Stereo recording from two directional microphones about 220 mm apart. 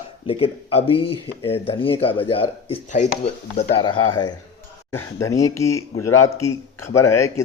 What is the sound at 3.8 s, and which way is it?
Speech, 20° left (ahead or behind).